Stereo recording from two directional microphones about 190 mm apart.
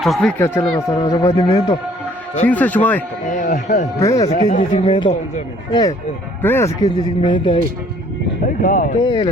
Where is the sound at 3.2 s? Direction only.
40° left (ahead or behind).